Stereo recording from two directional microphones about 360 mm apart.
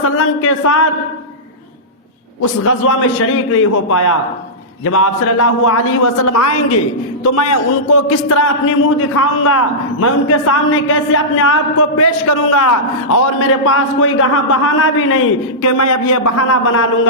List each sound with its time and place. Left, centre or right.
0.0 s a man's voice: left
3.2 s a man's voice: left